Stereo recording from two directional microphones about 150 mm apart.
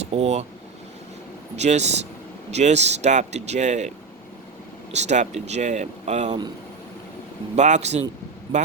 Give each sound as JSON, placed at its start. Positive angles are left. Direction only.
{"t": 0.0, "sound": "speech", "side_deg": -45}
{"t": 1.5, "sound": "speech", "side_deg": -50}
{"t": 7.5, "sound": "speech", "side_deg": -50}